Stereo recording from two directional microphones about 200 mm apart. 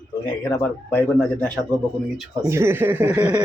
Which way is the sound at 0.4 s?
15° left (ahead or behind).